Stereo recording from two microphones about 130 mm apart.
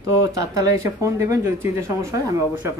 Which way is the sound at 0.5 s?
25° right (ahead or behind).